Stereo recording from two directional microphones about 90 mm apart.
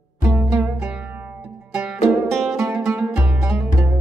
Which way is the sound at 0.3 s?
25° right (ahead or behind).